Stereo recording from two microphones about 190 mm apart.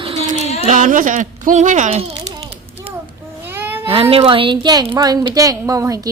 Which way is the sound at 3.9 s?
30° right (ahead or behind).